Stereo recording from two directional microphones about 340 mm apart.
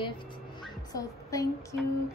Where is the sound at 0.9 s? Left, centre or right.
Centre.